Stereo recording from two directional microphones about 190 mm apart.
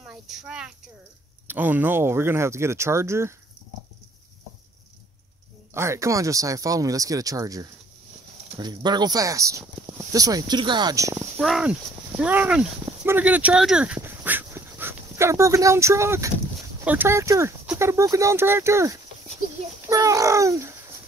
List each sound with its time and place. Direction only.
0.0 s speech: centre (ahead or behind)
5.8 s speech: 15° right (ahead or behind)
11.3 s speech: 5° right (ahead or behind)